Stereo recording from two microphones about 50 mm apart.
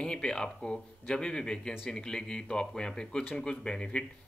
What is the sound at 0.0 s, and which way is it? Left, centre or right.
Speech, centre.